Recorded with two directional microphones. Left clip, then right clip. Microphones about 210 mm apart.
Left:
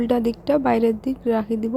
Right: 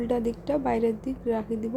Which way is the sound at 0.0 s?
20° left (ahead or behind).